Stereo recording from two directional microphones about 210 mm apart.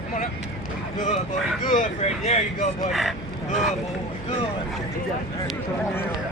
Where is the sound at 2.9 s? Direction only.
Centre (ahead or behind).